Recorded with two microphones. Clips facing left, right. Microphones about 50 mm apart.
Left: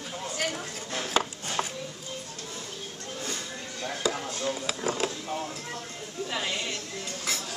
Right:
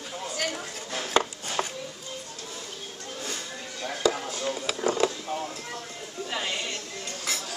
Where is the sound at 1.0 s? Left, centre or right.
Centre.